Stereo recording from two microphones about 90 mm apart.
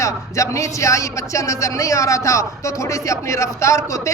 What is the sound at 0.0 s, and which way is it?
A man's voice, 35° left (ahead or behind).